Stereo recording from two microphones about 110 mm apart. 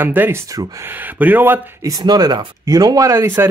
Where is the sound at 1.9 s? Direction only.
35° right (ahead or behind).